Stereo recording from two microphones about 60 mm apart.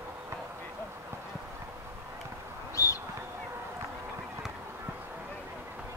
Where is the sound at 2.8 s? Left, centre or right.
Left.